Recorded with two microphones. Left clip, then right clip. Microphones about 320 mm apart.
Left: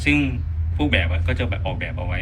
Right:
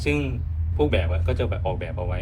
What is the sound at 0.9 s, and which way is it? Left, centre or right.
Speech, centre.